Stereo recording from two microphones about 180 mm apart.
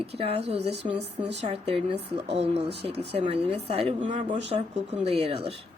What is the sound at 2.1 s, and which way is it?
Speech, 35° right (ahead or behind).